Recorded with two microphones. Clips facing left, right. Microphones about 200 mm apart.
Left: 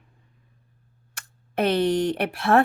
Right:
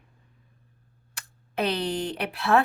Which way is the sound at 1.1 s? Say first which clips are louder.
Left 3 dB; 50° left (ahead or behind).